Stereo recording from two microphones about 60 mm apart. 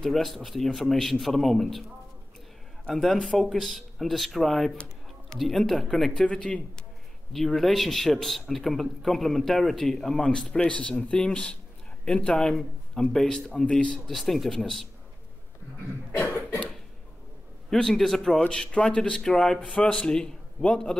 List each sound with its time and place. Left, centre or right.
0.0 s a man's voice: centre
2.9 s a man's voice: centre
7.3 s a man's voice: centre
10.2 s speech: centre
14.0 s a man's voice: centre
17.6 s a man's voice: centre
18.4 s speech: centre